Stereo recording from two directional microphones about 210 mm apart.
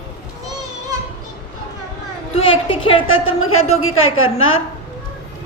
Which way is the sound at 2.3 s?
25° left (ahead or behind).